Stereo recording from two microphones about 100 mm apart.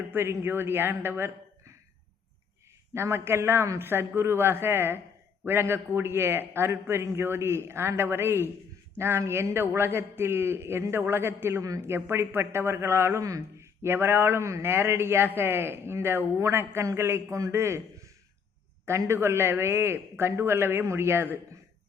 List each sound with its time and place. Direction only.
0.1 s a man's voice: 20° right (ahead or behind)
2.9 s a man's voice: 25° right (ahead or behind)
18.9 s a man's voice: 25° right (ahead or behind)